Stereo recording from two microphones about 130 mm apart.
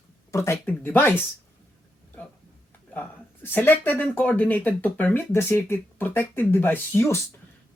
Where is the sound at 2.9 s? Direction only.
15° left (ahead or behind).